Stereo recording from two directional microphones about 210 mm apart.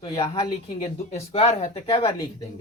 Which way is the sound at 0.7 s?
30° left (ahead or behind).